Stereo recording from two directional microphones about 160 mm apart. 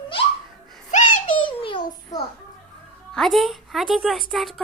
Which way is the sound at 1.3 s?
30° left (ahead or behind).